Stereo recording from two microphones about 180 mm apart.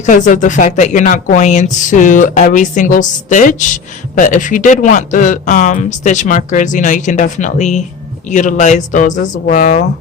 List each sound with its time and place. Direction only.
0.0 s speech: 45° left (ahead or behind)